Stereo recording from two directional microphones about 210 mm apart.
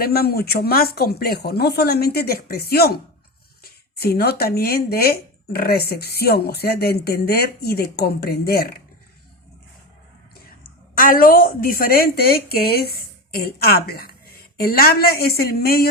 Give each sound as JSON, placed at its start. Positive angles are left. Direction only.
{"t": 0.0, "sound": "speech", "side_deg": 45}
{"t": 10.9, "sound": "speech", "side_deg": 40}